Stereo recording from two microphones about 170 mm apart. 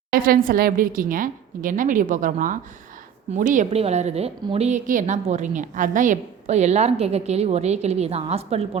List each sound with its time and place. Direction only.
0.1 s a woman's voice: 55° right (ahead or behind); by 8.8 s 35° right (ahead or behind)